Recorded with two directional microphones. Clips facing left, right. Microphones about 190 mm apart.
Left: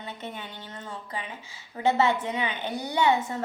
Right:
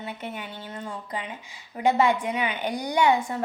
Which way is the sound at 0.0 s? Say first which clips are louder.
Right 3 dB; 10° right (ahead or behind).